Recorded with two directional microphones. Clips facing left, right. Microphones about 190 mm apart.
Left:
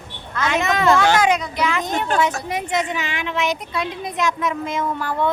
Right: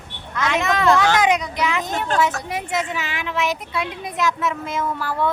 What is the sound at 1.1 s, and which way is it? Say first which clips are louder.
Speech: left 1 dB; 20° right (ahead or behind).